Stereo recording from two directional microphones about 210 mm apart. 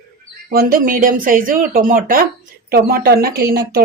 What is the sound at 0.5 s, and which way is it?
A woman's voice, 45° right (ahead or behind).